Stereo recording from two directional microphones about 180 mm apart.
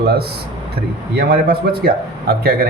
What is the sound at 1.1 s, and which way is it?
Speech, 60° right (ahead or behind).